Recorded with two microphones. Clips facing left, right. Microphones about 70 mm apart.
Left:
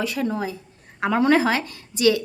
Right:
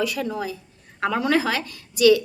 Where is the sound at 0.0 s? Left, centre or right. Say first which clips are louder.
Left 1 dB; left.